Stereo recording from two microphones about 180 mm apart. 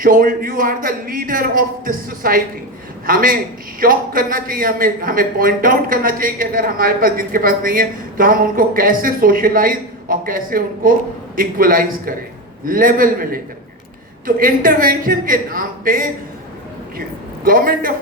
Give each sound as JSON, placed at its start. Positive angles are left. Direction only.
{"t": 0.0, "sound": "a man's voice", "side_deg": -50}
{"t": 17.4, "sound": "a man's voice", "side_deg": -50}